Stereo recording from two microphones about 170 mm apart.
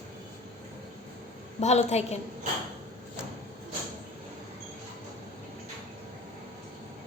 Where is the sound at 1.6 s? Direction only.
40° left (ahead or behind).